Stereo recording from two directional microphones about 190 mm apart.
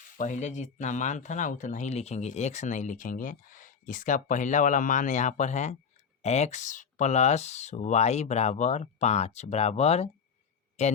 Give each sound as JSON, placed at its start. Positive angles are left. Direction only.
{"t": 0.2, "sound": "speech", "side_deg": 40}